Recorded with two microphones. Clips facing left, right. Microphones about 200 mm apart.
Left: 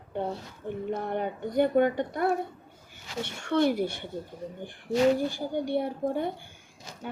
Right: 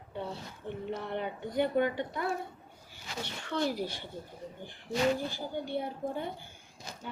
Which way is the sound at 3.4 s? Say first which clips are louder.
Left 8 dB; 60° left (ahead or behind).